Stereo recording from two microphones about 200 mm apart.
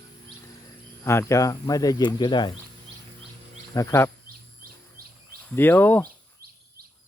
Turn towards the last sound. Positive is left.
turn(degrees=10)  # may be behind; listen again after turning